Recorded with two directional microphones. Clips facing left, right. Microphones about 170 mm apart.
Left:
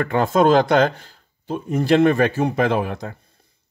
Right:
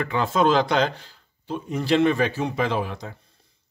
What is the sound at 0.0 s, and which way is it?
Speech, 50° left (ahead or behind).